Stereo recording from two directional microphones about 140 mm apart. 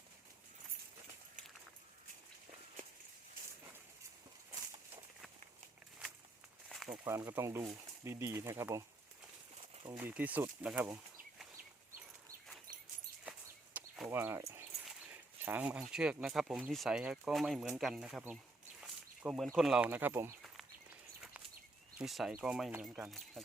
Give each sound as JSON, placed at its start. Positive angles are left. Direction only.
{"t": 6.7, "sound": "snake", "side_deg": 0}
{"t": 7.0, "sound": "speech", "side_deg": -20}
{"t": 9.6, "sound": "a sound", "side_deg": -40}
{"t": 10.0, "sound": "speech", "side_deg": -10}
{"t": 13.7, "sound": "a sound", "side_deg": -5}
{"t": 14.1, "sound": "speech", "side_deg": -15}
{"t": 18.8, "sound": "a sound", "side_deg": -5}
{"t": 19.5, "sound": "speech", "side_deg": -5}
{"t": 19.9, "sound": "speech", "side_deg": -15}
{"t": 21.9, "sound": "speech", "side_deg": 0}